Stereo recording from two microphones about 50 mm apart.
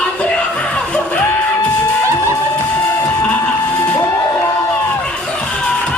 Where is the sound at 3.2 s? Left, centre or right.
Left.